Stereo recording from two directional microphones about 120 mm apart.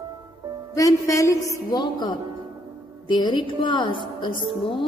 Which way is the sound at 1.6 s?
35° left (ahead or behind).